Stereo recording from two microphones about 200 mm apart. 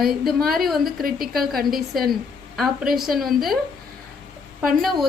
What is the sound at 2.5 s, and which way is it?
A woman's voice, centre (ahead or behind).